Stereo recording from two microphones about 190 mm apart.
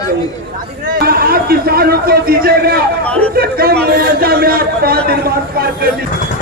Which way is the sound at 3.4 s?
55° right (ahead or behind).